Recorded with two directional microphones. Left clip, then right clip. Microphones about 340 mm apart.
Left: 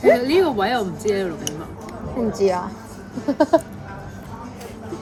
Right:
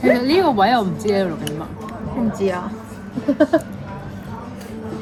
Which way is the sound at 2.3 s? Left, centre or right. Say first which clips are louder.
Left 3 dB; centre.